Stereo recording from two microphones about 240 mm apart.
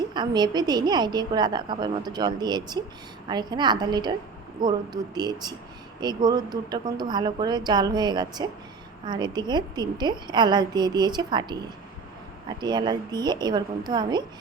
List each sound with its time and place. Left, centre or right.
0.1 s a woman's voice: centre